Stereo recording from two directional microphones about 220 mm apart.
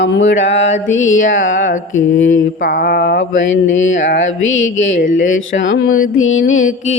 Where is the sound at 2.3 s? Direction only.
40° left (ahead or behind).